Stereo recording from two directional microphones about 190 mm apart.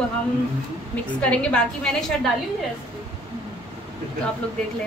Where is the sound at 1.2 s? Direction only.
5° left (ahead or behind).